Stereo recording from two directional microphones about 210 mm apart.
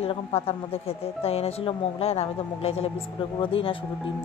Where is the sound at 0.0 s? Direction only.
30° left (ahead or behind).